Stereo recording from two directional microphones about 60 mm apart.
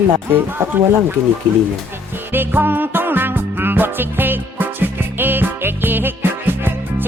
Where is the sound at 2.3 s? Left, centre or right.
Right.